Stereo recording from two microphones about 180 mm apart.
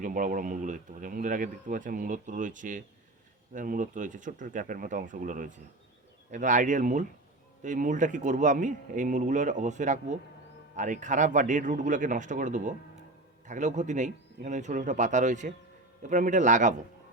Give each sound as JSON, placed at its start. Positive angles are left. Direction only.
{"t": 0.0, "sound": "speech", "side_deg": -45}